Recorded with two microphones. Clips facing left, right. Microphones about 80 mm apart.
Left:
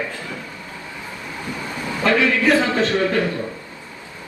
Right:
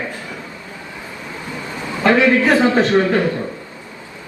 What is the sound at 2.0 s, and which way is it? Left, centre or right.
A man's voice, right.